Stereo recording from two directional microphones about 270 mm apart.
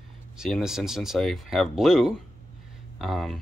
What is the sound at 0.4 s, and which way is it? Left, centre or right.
Speech, centre.